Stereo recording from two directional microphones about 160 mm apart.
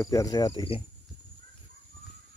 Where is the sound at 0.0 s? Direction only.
20° left (ahead or behind).